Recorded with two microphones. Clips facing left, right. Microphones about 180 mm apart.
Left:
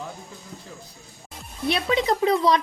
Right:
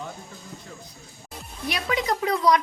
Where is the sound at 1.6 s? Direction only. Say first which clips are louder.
Left 4 dB; 25° left (ahead or behind).